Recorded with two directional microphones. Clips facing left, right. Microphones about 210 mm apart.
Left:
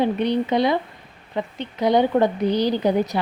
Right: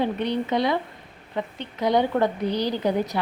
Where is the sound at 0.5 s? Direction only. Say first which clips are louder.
Left 3 dB; 20° left (ahead or behind).